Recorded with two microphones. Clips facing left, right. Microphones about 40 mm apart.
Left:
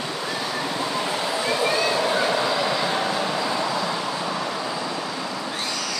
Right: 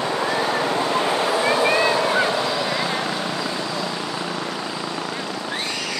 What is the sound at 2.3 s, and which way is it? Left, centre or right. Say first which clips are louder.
Vehicle: even; centre.